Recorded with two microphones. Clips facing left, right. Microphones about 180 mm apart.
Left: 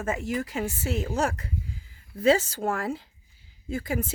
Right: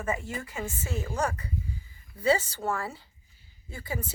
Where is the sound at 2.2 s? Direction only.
90° left.